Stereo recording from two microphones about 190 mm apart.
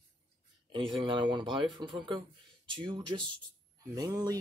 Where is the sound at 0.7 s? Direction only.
25° right (ahead or behind).